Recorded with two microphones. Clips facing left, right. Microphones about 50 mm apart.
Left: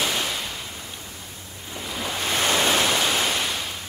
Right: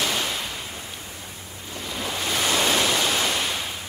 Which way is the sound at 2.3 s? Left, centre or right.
Left.